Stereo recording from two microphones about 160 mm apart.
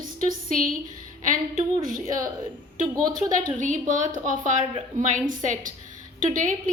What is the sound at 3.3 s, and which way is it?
A woman's voice, 55° right (ahead or behind).